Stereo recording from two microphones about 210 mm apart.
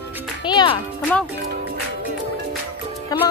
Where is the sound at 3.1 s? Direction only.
20° left (ahead or behind).